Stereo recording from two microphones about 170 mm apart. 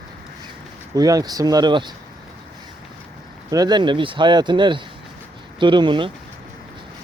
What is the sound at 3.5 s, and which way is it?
Speech, 25° right (ahead or behind).